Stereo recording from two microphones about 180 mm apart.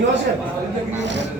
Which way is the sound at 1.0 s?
80° right.